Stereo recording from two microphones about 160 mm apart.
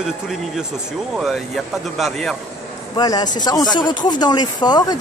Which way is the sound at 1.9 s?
Centre (ahead or behind).